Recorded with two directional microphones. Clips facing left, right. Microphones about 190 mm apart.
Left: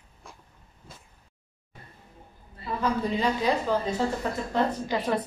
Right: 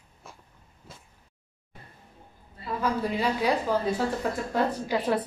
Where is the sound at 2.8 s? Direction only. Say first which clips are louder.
Left 1 dB; 10° right (ahead or behind).